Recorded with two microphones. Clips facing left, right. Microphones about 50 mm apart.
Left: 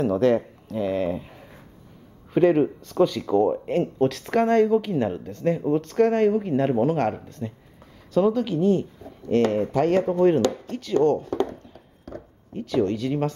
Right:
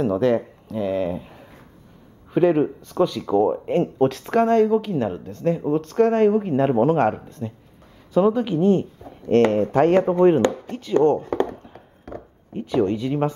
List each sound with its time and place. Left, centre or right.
0.0 s speech: centre
8.1 s speech: centre
10.7 s speech: centre
11.0 s chopping: right